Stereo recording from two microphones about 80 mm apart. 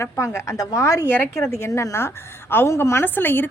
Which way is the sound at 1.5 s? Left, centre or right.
Left.